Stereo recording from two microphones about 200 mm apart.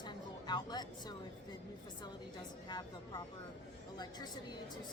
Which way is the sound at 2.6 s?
20° left (ahead or behind).